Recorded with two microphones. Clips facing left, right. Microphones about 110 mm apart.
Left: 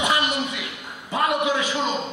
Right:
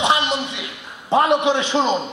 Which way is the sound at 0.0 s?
25° right (ahead or behind).